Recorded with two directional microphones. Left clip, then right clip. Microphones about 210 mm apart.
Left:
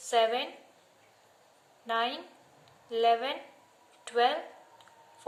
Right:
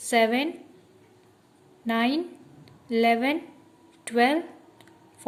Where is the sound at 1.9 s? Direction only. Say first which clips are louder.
Right 5 dB; 40° right (ahead or behind).